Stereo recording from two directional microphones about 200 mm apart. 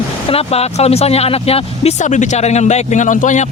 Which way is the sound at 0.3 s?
30° left (ahead or behind).